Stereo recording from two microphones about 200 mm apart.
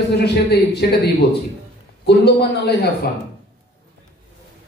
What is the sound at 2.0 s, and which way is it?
Speech, 55° left (ahead or behind).